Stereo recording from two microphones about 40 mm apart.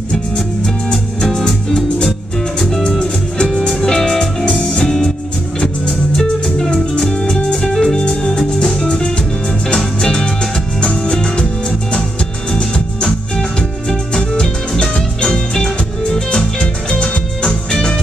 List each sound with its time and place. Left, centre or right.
1.2 s music: centre
2.6 s music: centre
8.4 s music: left